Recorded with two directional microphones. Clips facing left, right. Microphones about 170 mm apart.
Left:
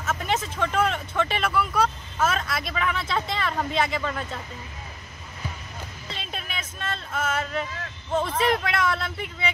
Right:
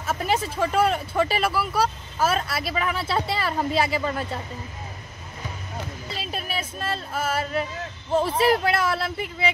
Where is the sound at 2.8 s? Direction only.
35° right (ahead or behind).